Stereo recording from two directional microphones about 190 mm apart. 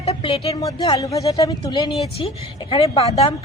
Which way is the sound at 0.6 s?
20° left (ahead or behind).